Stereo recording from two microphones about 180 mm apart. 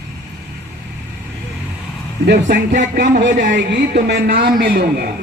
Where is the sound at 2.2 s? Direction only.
60° right (ahead or behind).